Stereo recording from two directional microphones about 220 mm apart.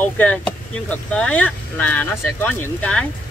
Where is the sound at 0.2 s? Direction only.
5° left (ahead or behind).